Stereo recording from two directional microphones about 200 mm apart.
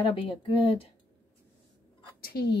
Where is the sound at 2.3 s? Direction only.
50° left (ahead or behind).